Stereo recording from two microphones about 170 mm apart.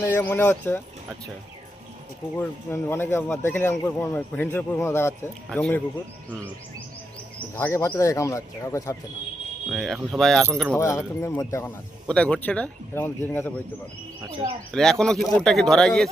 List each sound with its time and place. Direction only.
0.0 s a man's voice: 15° left (ahead or behind)
2.4 s a man's voice: 15° left (ahead or behind)
7.5 s a man's voice: 10° left (ahead or behind)
9.6 s speech: centre (ahead or behind)
10.8 s a man's voice: 15° left (ahead or behind)
14.7 s speech: 5° left (ahead or behind)